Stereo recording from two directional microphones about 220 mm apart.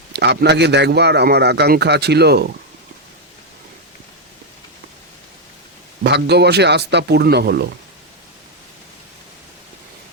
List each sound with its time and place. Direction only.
0.1 s a man's voice: 50° right (ahead or behind)
6.0 s a man's voice: 50° right (ahead or behind)